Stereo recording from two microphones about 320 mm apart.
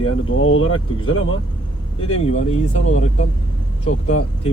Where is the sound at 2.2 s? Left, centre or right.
Centre.